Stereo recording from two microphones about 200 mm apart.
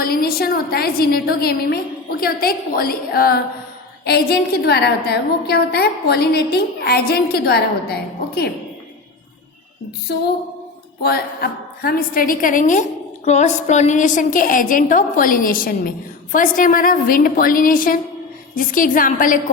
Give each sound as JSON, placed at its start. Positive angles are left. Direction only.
{"t": 0.0, "sound": "a woman's voice", "side_deg": 50}
{"t": 11.0, "sound": "a woman's voice", "side_deg": 50}